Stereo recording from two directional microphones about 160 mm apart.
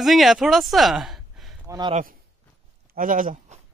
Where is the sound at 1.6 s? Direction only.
20° right (ahead or behind).